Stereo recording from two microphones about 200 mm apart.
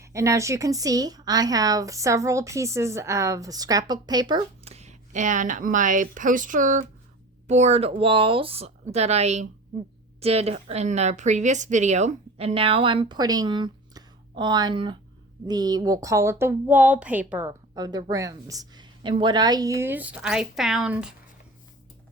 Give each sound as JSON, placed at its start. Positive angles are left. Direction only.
{"t": 0.0, "sound": "a woman's voice", "side_deg": -15}